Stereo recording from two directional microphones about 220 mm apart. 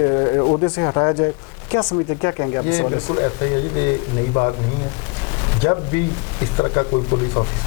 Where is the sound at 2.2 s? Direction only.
20° left (ahead or behind).